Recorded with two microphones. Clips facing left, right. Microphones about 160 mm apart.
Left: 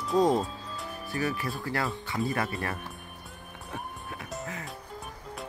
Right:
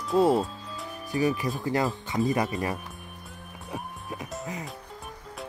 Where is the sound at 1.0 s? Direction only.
15° right (ahead or behind).